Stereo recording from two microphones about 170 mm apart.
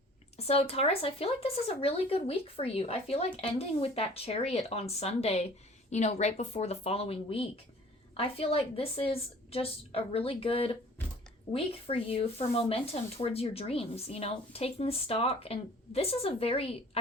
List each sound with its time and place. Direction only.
0.3 s speech: 35° left (ahead or behind)